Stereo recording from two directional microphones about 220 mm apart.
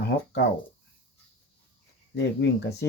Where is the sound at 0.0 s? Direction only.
50° left (ahead or behind).